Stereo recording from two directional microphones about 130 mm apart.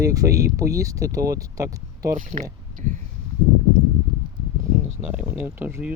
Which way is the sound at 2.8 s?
80° right.